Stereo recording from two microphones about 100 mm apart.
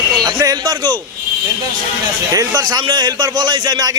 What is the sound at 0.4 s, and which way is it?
Speech, 45° right (ahead or behind).